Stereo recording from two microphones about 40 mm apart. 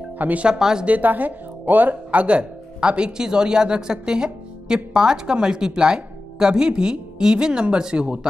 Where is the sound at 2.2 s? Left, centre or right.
Right.